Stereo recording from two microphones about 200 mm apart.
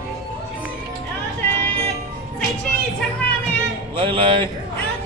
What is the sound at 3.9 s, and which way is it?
Music, 25° right (ahead or behind).